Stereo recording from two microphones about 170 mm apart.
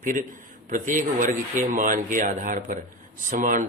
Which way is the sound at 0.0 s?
50° right (ahead or behind).